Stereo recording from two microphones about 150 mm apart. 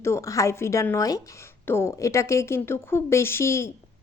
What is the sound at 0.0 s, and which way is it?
A woman's voice, 20° left (ahead or behind).